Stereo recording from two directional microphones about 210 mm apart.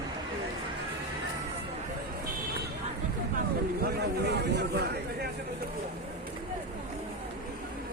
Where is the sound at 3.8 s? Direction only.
50° right (ahead or behind).